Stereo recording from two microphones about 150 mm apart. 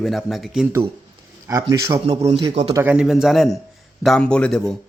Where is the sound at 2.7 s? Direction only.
15° right (ahead or behind).